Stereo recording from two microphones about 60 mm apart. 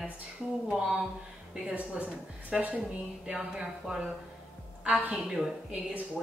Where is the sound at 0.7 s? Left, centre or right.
Centre.